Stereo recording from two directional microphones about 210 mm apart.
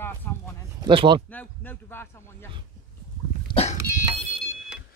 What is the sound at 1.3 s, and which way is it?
Speech, 10° left (ahead or behind).